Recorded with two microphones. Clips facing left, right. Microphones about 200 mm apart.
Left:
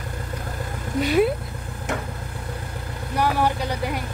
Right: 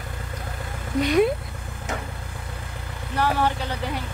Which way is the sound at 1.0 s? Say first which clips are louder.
Even; 5° left (ahead or behind).